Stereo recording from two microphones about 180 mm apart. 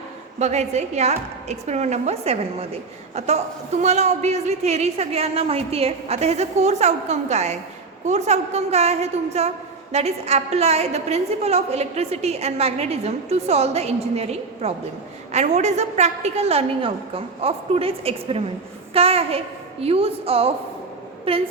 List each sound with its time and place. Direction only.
0.3 s a woman's voice: 40° right (ahead or behind)